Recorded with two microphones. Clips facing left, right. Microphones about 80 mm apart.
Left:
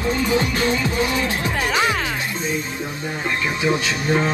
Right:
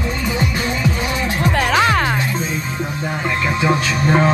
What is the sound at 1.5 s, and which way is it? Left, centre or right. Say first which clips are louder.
Music: right 6 dB; right.